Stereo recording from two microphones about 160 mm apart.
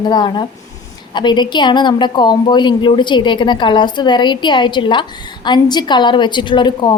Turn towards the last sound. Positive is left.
turn(degrees=25)  # may be behind; listen again after turning